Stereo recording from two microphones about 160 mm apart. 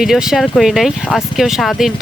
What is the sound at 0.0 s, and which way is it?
Speech, 5° right (ahead or behind).